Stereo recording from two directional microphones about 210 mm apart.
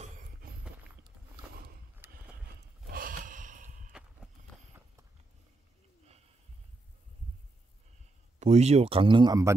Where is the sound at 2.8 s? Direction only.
40° right (ahead or behind).